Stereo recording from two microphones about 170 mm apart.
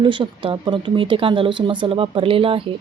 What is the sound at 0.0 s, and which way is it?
A woman's voice, 30° right (ahead or behind).